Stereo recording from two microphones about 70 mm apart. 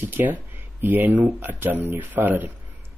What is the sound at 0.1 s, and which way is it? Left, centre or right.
Speech, right.